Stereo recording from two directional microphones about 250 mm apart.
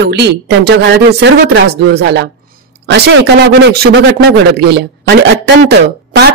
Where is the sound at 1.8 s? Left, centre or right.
Right.